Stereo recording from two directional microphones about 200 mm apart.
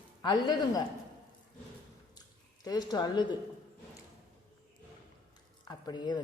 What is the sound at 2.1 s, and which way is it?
Squish, 20° left (ahead or behind).